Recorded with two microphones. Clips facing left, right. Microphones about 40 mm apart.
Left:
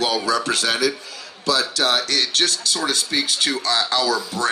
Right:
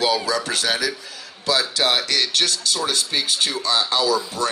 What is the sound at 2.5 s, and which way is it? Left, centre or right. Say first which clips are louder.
Speech: even; left.